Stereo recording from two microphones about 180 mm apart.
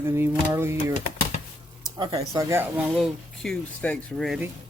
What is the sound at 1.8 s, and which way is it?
Speech, 25° right (ahead or behind).